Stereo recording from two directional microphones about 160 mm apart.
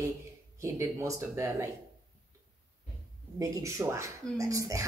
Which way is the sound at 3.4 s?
20° right (ahead or behind).